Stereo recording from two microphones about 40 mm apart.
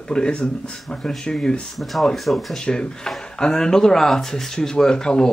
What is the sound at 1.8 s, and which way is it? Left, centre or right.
Speech, centre.